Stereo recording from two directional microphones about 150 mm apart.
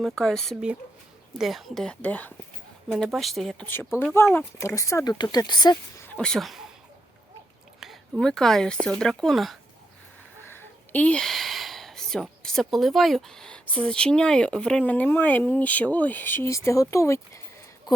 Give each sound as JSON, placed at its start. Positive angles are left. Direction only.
{"t": 0.0, "sound": "speech", "side_deg": 5}
{"t": 2.9, "sound": "speech", "side_deg": 0}
{"t": 4.0, "sound": "speech", "side_deg": 15}
{"t": 6.0, "sound": "speech", "side_deg": 10}
{"t": 7.8, "sound": "speech", "side_deg": 0}
{"t": 10.4, "sound": "speech", "side_deg": 15}